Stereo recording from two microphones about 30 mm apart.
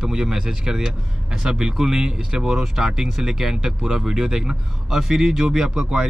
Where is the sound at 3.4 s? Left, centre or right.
Centre.